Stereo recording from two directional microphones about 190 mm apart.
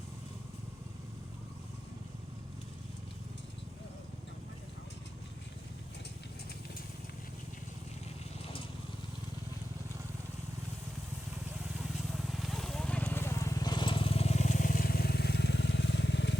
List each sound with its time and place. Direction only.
11.8 s vehicle: centre (ahead or behind); by 16.4 s 70° left (ahead or behind)